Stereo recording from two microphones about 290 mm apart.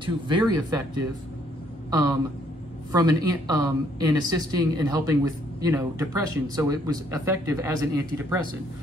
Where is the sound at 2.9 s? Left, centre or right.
Centre.